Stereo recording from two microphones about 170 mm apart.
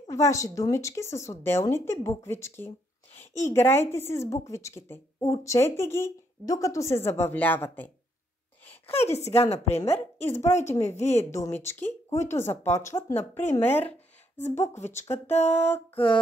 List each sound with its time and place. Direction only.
0.1 s a woman's voice: 20° left (ahead or behind)
8.8 s a woman's voice: 40° left (ahead or behind)
11.2 s a woman's voice: 15° left (ahead or behind)